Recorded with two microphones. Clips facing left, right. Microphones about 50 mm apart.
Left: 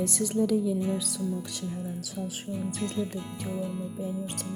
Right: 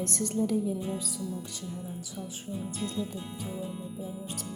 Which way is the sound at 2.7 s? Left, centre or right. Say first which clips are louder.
Left 2 dB; left.